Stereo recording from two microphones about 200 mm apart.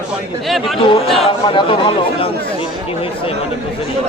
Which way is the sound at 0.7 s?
25° left (ahead or behind).